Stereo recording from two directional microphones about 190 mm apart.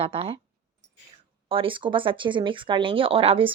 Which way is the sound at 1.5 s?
30° right (ahead or behind).